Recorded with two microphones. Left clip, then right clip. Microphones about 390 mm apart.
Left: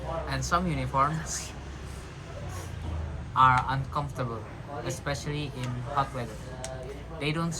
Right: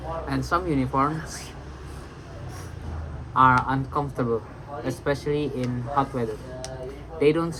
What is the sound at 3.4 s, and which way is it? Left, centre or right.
Speech, centre.